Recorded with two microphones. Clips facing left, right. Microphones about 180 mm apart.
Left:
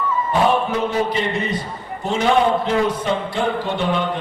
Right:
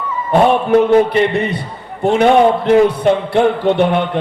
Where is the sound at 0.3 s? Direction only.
60° right (ahead or behind).